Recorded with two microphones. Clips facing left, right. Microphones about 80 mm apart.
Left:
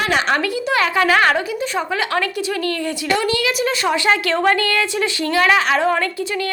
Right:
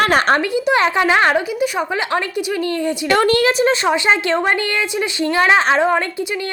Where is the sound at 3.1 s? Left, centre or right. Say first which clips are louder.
Right 5 dB; right.